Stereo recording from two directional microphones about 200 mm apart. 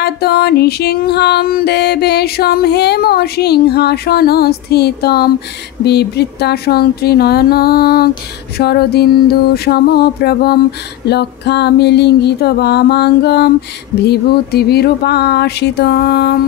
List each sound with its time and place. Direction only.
0.0 s music: 55° left (ahead or behind)